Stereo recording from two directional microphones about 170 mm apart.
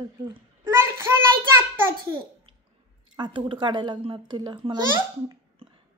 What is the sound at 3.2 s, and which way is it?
A child's voice, 30° right (ahead or behind).